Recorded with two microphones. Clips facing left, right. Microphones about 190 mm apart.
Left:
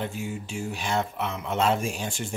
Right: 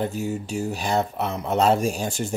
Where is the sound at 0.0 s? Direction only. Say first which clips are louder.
Right 6 dB; 40° right (ahead or behind).